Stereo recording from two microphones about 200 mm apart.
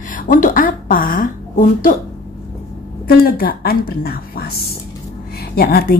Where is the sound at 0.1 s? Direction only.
40° left (ahead or behind).